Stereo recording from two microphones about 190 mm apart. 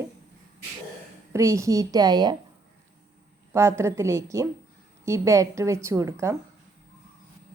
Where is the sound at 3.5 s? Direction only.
15° right (ahead or behind).